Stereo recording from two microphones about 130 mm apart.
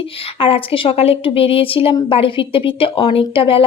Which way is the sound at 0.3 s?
45° left (ahead or behind).